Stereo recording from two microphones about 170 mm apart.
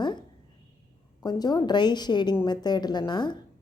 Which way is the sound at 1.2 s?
25° left (ahead or behind).